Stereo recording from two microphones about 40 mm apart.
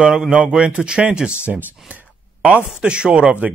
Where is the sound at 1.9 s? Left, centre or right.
Right.